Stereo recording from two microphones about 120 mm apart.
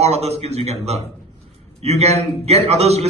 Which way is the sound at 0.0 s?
60° right (ahead or behind).